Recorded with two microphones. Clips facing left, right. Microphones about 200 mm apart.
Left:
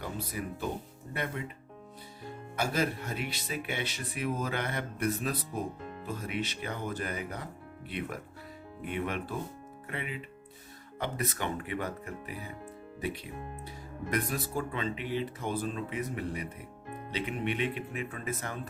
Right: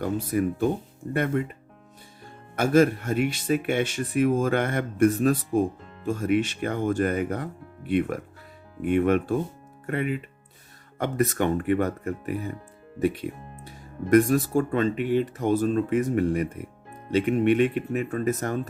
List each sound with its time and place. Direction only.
0.0 s speech: 50° right (ahead or behind)
2.6 s speech: 50° right (ahead or behind)